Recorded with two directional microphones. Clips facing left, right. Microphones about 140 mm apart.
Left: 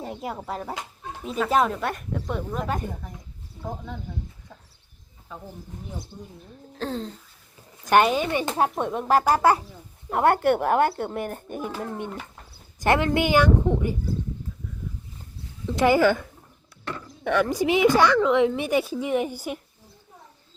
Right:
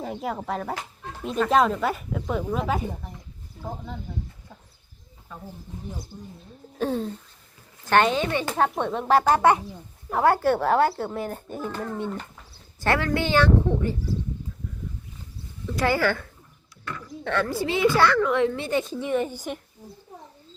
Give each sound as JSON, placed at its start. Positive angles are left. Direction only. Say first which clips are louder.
{"t": 0.0, "sound": "speech", "louder": "right 2 dB", "side_deg": 0}
{"t": 6.7, "sound": "a sound", "louder": "right 4 dB", "side_deg": -10}
{"t": 7.9, "sound": "speech", "louder": "left 1 dB", "side_deg": 10}
{"t": 15.6, "sound": "speech", "louder": "left 4 dB", "side_deg": 20}